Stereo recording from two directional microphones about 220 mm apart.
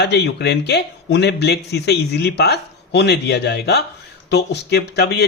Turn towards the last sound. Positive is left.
turn(degrees=50)  # may be behind; listen again after turning